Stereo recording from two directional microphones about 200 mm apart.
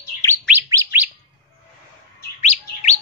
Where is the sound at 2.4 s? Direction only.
35° left (ahead or behind).